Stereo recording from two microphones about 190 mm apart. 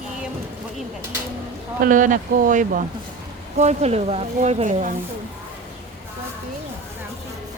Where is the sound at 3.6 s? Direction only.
35° right (ahead or behind).